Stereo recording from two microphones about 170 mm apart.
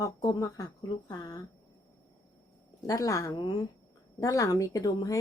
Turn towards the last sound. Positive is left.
turn(degrees=20)  # may be behind; listen again after turning